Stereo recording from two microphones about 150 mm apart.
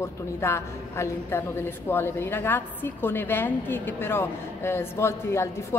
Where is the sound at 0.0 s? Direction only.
20° left (ahead or behind).